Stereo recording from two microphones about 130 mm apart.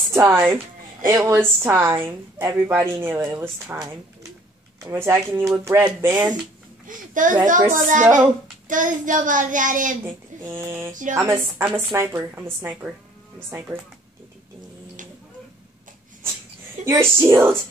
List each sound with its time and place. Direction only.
0.1 s a woman's voice: 20° right (ahead or behind)
6.9 s child singing: 90° right
7.7 s a child's voice: 80° right
8.6 s child singing: 90° right
10.4 s a woman's voice: 20° right (ahead or behind)
13.5 s a woman's voice: 20° right (ahead or behind)
16.8 s a woman's voice: 20° right (ahead or behind)